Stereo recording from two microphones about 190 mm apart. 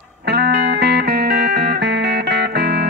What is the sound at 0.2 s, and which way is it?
Music, 60° right (ahead or behind).